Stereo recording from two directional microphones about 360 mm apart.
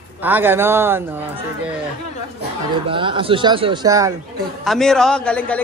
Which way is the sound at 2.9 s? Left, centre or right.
Centre.